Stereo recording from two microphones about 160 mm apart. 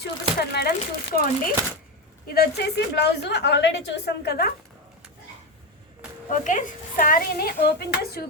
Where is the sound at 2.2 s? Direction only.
70° left (ahead or behind).